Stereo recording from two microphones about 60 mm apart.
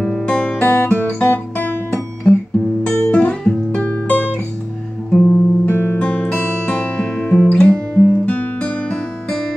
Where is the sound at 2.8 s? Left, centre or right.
Centre.